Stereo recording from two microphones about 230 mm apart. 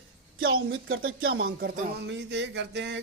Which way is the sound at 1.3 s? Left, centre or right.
Right.